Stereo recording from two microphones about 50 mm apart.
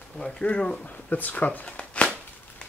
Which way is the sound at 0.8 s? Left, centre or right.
Left.